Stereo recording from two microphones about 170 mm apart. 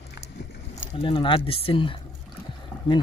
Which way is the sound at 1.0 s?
30° left (ahead or behind).